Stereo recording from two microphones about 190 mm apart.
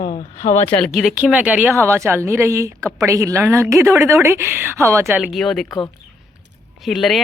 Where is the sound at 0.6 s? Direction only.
5° left (ahead or behind).